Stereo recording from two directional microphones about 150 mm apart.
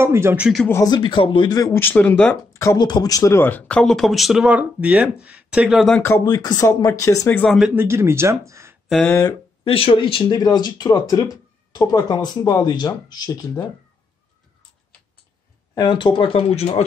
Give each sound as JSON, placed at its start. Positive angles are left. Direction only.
{"t": 0.0, "sound": "speech", "side_deg": -15}
{"t": 0.8, "sound": "speech", "side_deg": 30}
{"t": 2.5, "sound": "speech", "side_deg": 20}
{"t": 5.9, "sound": "speech", "side_deg": 15}
{"t": 6.2, "sound": "speech", "side_deg": 25}
{"t": 7.5, "sound": "speech", "side_deg": -10}
{"t": 8.8, "sound": "a sound", "side_deg": 0}
{"t": 9.7, "sound": "speech", "side_deg": 40}
{"t": 15.7, "sound": "speech", "side_deg": 30}